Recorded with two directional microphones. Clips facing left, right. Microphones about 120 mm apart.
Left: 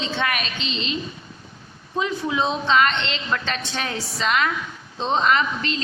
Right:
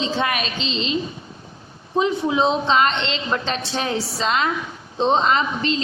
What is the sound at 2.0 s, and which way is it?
A woman's voice, 25° right (ahead or behind).